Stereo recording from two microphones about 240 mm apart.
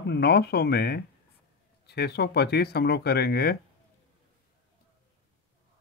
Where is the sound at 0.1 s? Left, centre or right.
Left.